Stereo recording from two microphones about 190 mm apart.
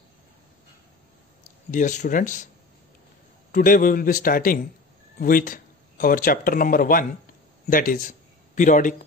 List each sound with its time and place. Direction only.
1.7 s a man's voice: 40° left (ahead or behind)
3.5 s a man's voice: 45° left (ahead or behind)